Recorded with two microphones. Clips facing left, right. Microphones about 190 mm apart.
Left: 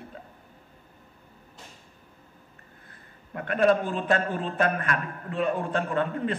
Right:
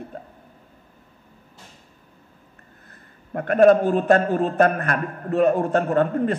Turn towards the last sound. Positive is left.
turn(degrees=-45)  # may be behind; listen again after turning